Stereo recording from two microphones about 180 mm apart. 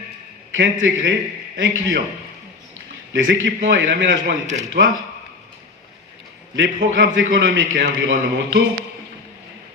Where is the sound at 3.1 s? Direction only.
85° right.